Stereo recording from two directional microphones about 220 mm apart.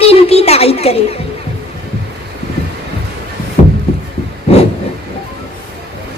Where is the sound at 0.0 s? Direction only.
25° left (ahead or behind).